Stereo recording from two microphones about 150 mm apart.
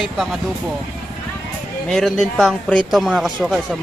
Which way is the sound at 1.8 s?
5° left (ahead or behind).